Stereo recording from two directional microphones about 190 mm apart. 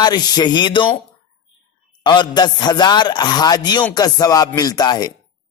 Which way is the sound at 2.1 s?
20° left (ahead or behind).